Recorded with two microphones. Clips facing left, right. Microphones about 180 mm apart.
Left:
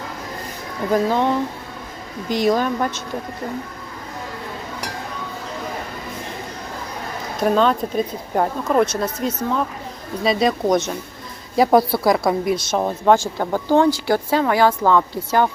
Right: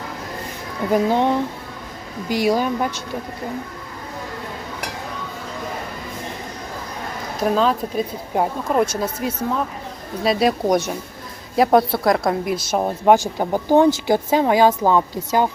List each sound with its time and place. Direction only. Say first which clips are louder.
0.9 s speech: right 1 dB; 15° right (ahead or behind)
2.3 s speech: even; 10° right (ahead or behind)
7.4 s speech: left 1 dB; 5° right (ahead or behind)
11.5 s speech: even; centre (ahead or behind)
12.8 s speech: right 2 dB; 15° right (ahead or behind)